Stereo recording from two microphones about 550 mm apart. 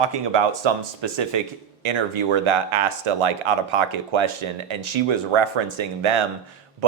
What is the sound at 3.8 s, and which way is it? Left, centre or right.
Speech, right.